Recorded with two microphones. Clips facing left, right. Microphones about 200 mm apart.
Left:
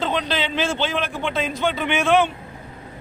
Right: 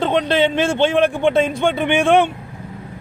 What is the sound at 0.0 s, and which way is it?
A man's voice, 55° right (ahead or behind).